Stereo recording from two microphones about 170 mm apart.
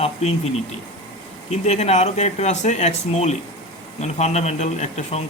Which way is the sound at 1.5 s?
40° left (ahead or behind).